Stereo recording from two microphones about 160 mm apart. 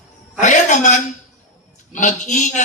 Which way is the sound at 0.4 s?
50° left (ahead or behind).